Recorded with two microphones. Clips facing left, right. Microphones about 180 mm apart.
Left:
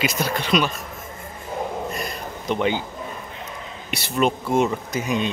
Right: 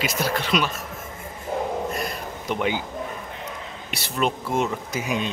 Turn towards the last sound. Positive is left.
turn(degrees=-5)  # may be behind; listen again after turning